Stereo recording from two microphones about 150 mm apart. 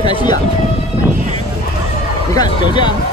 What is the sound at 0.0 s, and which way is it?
Siren, 30° left (ahead or behind).